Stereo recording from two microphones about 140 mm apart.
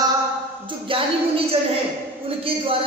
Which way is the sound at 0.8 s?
40° right (ahead or behind).